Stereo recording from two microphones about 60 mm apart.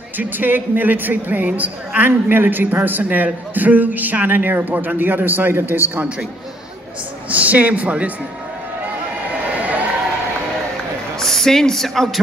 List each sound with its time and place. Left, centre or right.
0.2 s a man's voice: right
7.2 s a man's voice: right
11.1 s speech: centre